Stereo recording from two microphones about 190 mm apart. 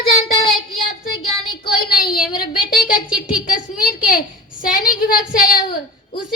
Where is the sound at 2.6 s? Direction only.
50° left (ahead or behind).